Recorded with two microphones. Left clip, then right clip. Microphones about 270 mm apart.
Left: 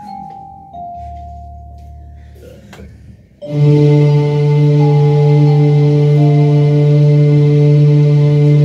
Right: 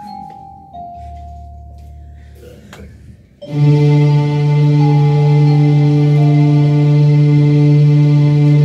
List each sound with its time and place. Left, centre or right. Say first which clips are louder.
3.4 s music: left 3 dB; left